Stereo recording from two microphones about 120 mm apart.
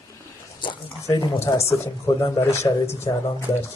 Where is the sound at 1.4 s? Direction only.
25° left (ahead or behind).